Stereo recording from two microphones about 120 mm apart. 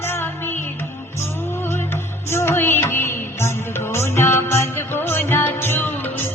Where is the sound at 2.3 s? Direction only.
20° left (ahead or behind).